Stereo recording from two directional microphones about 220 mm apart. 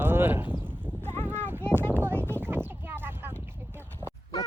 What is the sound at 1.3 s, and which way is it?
Boat, 10° right (ahead or behind).